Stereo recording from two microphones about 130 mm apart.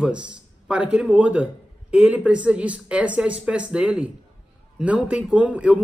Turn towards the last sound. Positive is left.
turn(degrees=-10)  # may be behind; listen again after turning